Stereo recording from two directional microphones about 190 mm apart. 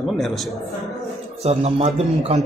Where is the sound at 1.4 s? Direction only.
35° right (ahead or behind).